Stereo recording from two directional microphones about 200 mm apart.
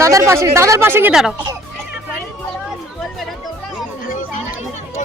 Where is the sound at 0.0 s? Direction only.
15° right (ahead or behind).